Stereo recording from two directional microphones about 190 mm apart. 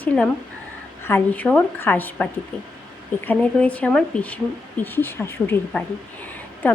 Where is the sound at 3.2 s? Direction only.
10° left (ahead or behind).